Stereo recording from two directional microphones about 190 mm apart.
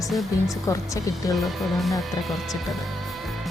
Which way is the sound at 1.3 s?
Centre (ahead or behind).